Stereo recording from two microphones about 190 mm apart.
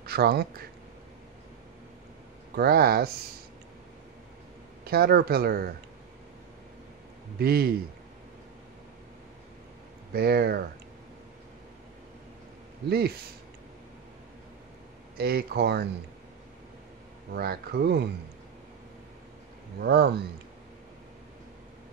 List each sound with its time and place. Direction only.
0.0 s speech: 55° right (ahead or behind)
2.5 s speech: 55° right (ahead or behind)
4.8 s speech: 55° right (ahead or behind)
7.3 s speech: 55° right (ahead or behind)
10.1 s speech: 55° right (ahead or behind)
15.1 s speech: 55° right (ahead or behind)
17.3 s speech: 55° right (ahead or behind)
19.8 s speech: 55° right (ahead or behind)